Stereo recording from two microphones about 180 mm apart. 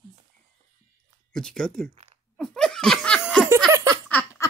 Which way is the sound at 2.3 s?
5° left (ahead or behind).